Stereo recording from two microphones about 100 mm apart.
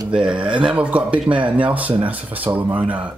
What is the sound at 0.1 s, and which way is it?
Speech, 10° right (ahead or behind).